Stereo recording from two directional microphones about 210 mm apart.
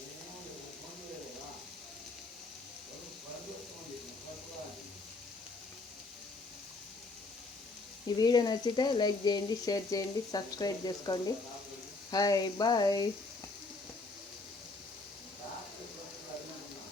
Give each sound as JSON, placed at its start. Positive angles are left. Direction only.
{"t": 8.2, "sound": "speech", "side_deg": 20}